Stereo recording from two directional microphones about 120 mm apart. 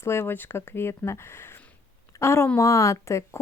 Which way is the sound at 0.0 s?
20° left (ahead or behind).